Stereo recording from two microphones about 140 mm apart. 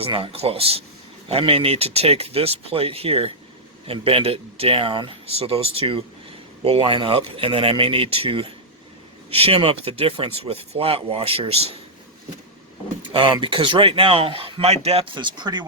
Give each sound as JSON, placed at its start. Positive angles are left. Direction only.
{"t": 0.0, "sound": "speech", "side_deg": -40}
{"t": 13.0, "sound": "speech", "side_deg": -35}